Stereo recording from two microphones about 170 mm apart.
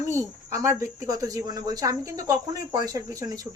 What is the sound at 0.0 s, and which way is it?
Speech, 20° right (ahead or behind).